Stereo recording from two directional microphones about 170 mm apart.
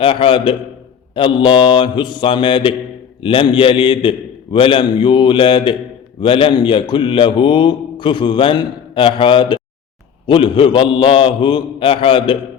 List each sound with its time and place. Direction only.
0.0 s a man's voice: 30° left (ahead or behind)